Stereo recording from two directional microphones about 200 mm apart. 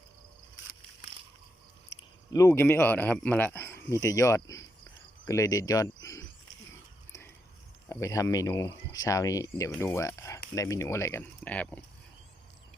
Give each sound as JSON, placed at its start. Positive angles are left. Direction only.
{"t": 2.3, "sound": "speech", "side_deg": 15}
{"t": 7.9, "sound": "speech", "side_deg": 15}